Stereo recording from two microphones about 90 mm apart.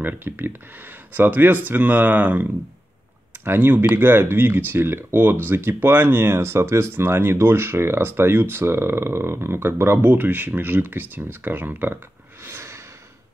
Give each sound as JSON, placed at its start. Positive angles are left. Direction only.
{"t": 0.0, "sound": "speech", "side_deg": -25}
{"t": 3.4, "sound": "speech", "side_deg": -25}
{"t": 12.4, "sound": "a sound", "side_deg": -30}